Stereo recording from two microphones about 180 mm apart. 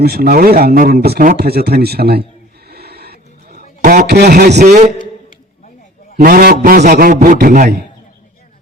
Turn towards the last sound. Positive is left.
turn(degrees=-55)  # may be behind; listen again after turning